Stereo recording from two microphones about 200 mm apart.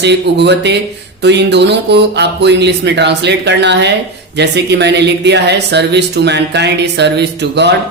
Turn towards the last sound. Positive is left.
turn(degrees=-60)  # may be behind; listen again after turning